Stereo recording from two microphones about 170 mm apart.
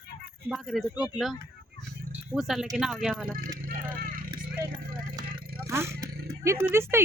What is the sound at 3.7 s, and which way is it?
Vehicle, 55° right (ahead or behind).